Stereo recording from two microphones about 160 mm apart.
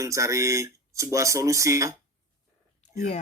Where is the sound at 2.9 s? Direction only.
50° left (ahead or behind).